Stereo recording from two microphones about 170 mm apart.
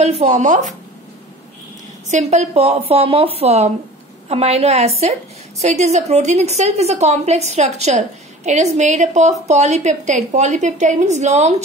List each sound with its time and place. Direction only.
0.0 s a woman's voice: 40° right (ahead or behind)
2.0 s a woman's voice: 45° right (ahead or behind)